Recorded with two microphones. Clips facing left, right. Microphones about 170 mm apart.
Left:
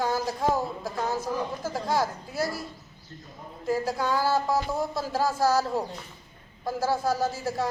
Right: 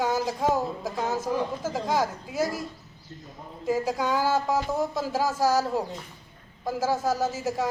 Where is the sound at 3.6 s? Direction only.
10° right (ahead or behind).